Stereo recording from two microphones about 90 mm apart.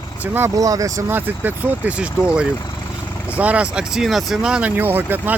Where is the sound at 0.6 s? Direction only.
40° right (ahead or behind).